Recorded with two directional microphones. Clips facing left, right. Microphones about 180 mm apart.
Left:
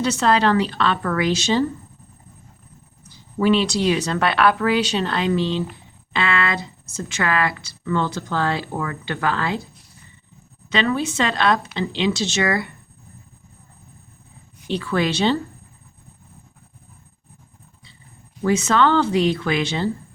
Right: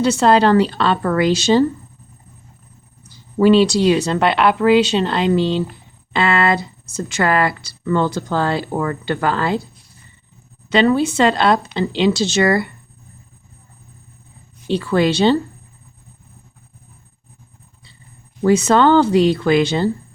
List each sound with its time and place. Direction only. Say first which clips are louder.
0.0 s speech: right 5 dB; 30° right (ahead or behind)
3.3 s speech: right 6 dB; 35° right (ahead or behind)
10.7 s speech: right 7 dB; 35° right (ahead or behind)
14.7 s speech: right 5 dB; 35° right (ahead or behind)
18.4 s speech: right 5 dB; 35° right (ahead or behind)